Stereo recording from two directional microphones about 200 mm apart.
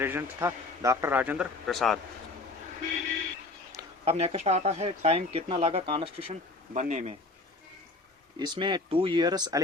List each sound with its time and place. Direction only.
0.0 s speech: 10° right (ahead or behind)
4.0 s speech: 30° right (ahead or behind)
6.7 s speech: 35° right (ahead or behind)
8.4 s speech: 25° right (ahead or behind)